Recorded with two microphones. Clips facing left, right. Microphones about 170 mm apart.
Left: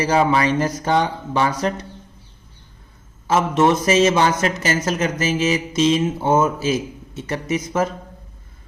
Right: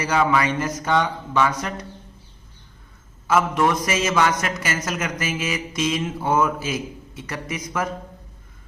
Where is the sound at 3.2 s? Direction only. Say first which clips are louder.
Left 3 dB; 25° left (ahead or behind).